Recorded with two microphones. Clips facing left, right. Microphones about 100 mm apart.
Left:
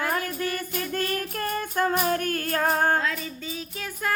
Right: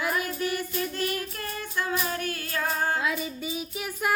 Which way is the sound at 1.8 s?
45° left (ahead or behind).